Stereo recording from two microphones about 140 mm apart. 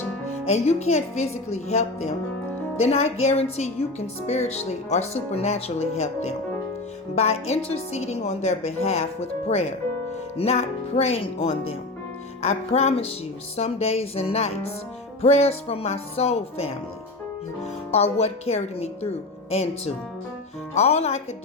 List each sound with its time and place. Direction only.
0.4 s a woman's voice: 50° left (ahead or behind)
17.9 s a woman's voice: 50° left (ahead or behind)